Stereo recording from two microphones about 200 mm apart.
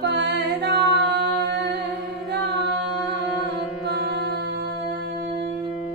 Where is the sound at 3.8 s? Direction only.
55° right (ahead or behind).